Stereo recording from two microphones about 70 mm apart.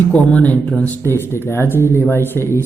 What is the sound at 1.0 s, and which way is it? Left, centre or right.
Speech, left.